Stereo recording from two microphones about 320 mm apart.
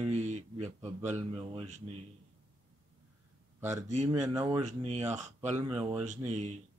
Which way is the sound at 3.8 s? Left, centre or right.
Right.